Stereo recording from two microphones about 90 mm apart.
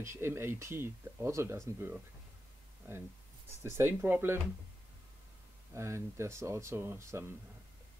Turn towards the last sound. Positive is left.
turn(degrees=-30)  # may be behind; listen again after turning